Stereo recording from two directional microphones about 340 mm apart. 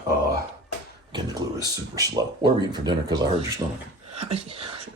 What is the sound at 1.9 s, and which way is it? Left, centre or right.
Speech, centre.